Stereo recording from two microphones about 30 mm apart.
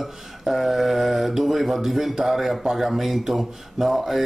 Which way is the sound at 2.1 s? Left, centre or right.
Centre.